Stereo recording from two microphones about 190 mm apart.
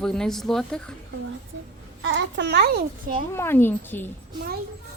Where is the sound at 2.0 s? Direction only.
80° right; by 3.2 s 50° right (ahead or behind).